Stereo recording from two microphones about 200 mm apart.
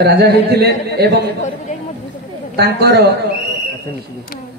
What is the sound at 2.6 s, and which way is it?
Speech, 55° right (ahead or behind).